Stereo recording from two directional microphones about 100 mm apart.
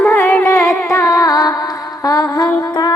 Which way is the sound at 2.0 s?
35° left (ahead or behind).